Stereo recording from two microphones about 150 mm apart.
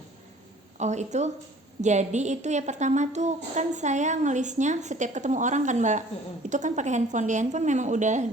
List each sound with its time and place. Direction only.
0.8 s a woman's voice: 50° right (ahead or behind)